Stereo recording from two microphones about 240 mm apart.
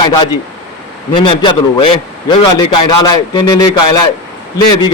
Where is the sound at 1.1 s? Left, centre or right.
Left.